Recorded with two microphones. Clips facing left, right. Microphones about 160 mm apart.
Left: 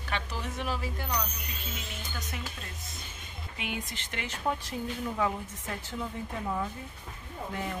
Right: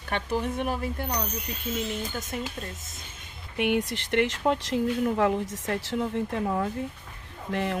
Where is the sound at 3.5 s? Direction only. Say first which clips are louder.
Right 12 dB; 65° right (ahead or behind).